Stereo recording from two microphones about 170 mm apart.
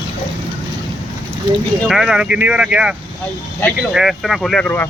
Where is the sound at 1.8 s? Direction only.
5° right (ahead or behind).